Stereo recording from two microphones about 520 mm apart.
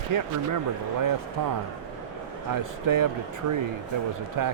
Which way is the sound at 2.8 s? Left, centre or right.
Right.